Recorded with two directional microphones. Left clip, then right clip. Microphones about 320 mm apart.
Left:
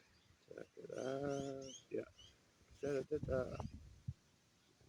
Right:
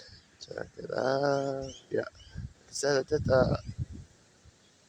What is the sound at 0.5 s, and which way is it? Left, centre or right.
Speech, centre.